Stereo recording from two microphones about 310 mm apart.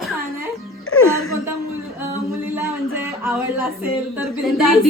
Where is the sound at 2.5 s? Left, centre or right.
Centre.